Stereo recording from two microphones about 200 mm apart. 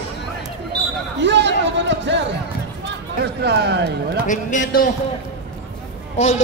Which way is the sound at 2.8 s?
55° right (ahead or behind).